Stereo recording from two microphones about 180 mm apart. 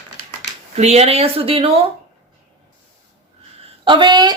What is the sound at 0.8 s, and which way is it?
Speech, 35° right (ahead or behind).